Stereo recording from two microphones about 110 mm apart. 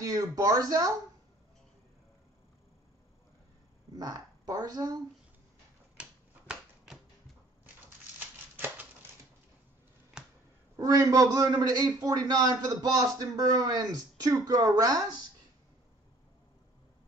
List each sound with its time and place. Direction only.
0.0 s a man's voice: 35° right (ahead or behind)
3.9 s speech: 35° right (ahead or behind)
5.9 s typewriter: 10° right (ahead or behind)
8.5 s a sound: 20° right (ahead or behind)
10.2 s finger snapping: 5° right (ahead or behind)
10.8 s a man's voice: 30° right (ahead or behind)